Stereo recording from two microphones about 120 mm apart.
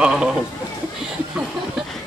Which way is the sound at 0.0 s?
5° right (ahead or behind).